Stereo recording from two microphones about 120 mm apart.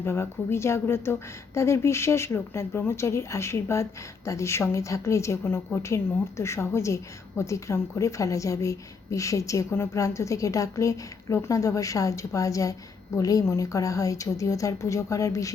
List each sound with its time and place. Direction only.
0.0 s a woman's voice: 20° left (ahead or behind)